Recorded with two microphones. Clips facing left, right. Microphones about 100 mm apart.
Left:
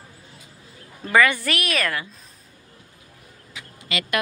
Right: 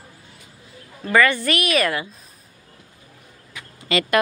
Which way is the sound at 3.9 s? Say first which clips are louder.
Right 7 dB; 35° right (ahead or behind).